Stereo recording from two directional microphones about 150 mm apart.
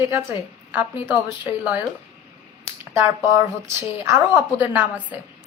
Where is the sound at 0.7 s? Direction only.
15° right (ahead or behind).